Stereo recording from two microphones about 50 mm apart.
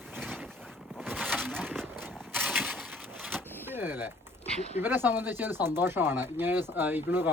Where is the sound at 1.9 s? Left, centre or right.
Right.